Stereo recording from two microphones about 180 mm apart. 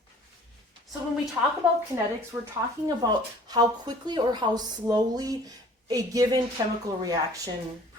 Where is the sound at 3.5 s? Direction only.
25° right (ahead or behind).